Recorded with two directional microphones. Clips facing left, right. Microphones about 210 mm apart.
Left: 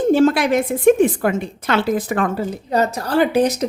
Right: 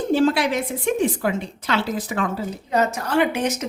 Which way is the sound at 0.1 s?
50° left (ahead or behind).